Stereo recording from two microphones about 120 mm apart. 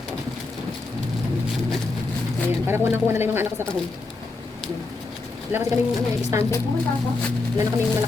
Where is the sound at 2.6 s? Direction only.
20° right (ahead or behind).